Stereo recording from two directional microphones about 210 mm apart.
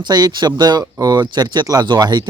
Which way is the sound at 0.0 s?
20° right (ahead or behind).